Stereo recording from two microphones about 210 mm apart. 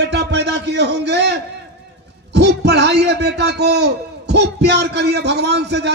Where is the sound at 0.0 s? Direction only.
55° right (ahead or behind).